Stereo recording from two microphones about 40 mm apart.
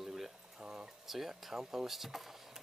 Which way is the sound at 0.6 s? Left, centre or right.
Centre.